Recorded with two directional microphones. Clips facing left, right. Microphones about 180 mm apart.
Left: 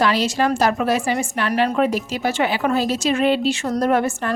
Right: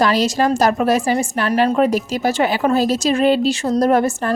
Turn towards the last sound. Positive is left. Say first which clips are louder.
# right 3 dB
turn(degrees=-40)  # may be behind; listen again after turning